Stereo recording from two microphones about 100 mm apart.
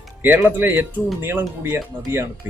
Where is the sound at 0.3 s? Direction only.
20° right (ahead or behind).